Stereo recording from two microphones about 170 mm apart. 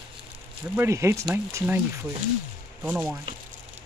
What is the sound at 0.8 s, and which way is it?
Speech, 15° right (ahead or behind).